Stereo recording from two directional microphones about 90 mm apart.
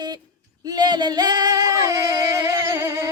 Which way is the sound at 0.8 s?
50° right (ahead or behind).